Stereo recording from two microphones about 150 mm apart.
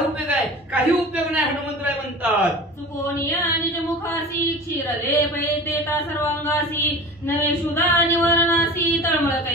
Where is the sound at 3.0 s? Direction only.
20° left (ahead or behind).